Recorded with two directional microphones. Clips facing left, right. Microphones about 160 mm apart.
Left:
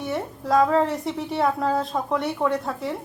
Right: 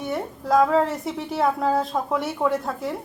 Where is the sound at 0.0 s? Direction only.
Centre (ahead or behind).